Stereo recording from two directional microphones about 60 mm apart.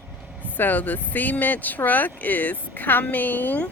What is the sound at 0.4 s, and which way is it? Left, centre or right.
Speech, left.